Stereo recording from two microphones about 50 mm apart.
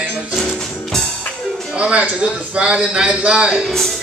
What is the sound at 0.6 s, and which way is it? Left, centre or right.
Music, centre.